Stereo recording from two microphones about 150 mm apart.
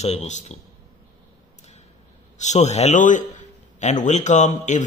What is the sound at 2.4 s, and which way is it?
A man's voice, 50° left (ahead or behind).